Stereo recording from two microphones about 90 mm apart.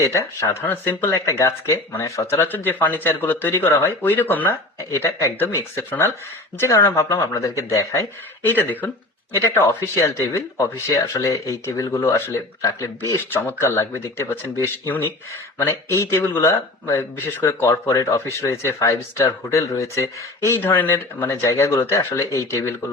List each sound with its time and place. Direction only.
0.1 s speech: 35° left (ahead or behind)
0.6 s speech: 25° left (ahead or behind)
1.1 s speech: 35° left (ahead or behind)
2.5 s speech: 20° left (ahead or behind); by 8.0 s 35° left (ahead or behind)
8.4 s speech: 20° left (ahead or behind)
12.6 s speech: 40° left (ahead or behind)
13.3 s speech: 25° left (ahead or behind)
20.6 s speech: 25° left (ahead or behind)